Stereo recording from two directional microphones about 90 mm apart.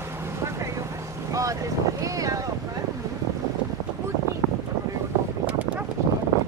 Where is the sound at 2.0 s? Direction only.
40° right (ahead or behind).